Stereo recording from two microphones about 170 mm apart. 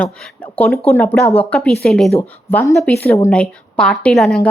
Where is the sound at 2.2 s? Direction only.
15° left (ahead or behind).